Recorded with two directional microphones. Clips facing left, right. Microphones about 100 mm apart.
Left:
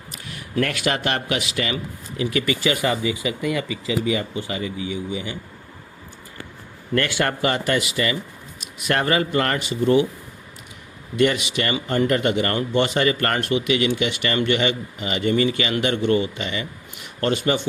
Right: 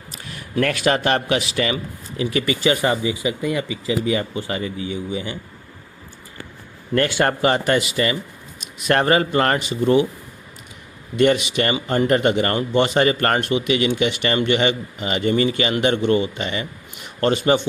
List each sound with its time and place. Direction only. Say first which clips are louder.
0.1 s speech: right 1 dB; 35° right (ahead or behind)
4.4 s speech: right 2 dB; 40° right (ahead or behind)
6.9 s speech: right 3 dB; 30° right (ahead or behind)
11.2 s speech: right 3 dB; 30° right (ahead or behind)